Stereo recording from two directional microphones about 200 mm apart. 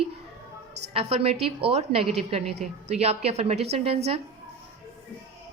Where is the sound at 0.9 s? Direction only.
30° right (ahead or behind).